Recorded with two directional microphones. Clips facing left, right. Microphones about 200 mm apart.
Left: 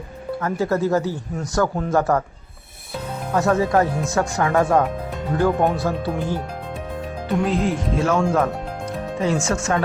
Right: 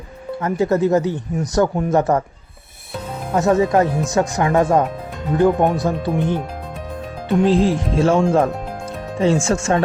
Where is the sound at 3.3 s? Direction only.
20° right (ahead or behind).